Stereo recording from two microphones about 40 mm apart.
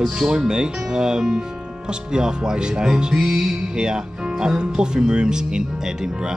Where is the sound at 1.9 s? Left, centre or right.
Centre.